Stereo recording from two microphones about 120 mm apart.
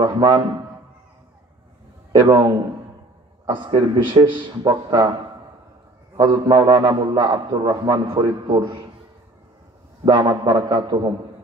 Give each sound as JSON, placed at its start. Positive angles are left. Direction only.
{"t": 0.0, "sound": "a man's voice", "side_deg": -35}
{"t": 2.1, "sound": "a man's voice", "side_deg": -40}
{"t": 3.7, "sound": "a man's voice", "side_deg": -40}
{"t": 6.1, "sound": "a man's voice", "side_deg": -35}
{"t": 10.0, "sound": "a man's voice", "side_deg": -35}